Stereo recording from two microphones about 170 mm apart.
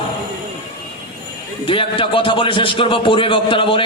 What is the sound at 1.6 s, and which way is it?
A man's voice, 30° left (ahead or behind).